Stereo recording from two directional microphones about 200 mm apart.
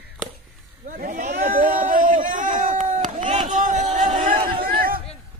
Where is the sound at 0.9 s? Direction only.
45° right (ahead or behind).